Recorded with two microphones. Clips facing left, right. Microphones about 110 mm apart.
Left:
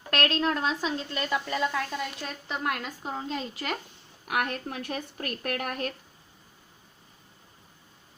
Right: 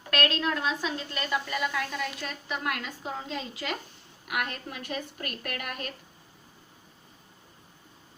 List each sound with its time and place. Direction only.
0.1 s a woman's voice: 35° left (ahead or behind)
4.3 s a woman's voice: 35° left (ahead or behind)